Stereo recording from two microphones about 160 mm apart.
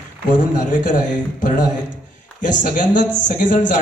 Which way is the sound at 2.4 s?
55° left (ahead or behind).